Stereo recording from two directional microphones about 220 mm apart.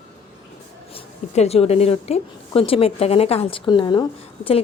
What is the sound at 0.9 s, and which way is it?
A woman's voice, 30° left (ahead or behind).